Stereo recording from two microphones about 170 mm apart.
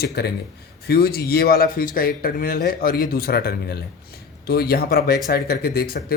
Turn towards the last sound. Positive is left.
turn(degrees=60)  # may be behind; listen again after turning